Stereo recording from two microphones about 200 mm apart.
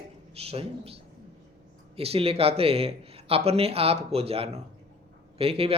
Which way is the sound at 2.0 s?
30° right (ahead or behind).